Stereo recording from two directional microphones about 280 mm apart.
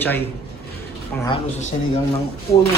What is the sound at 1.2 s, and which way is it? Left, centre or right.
Speech, centre.